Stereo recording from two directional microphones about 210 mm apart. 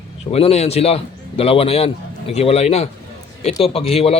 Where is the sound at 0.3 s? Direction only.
30° left (ahead or behind).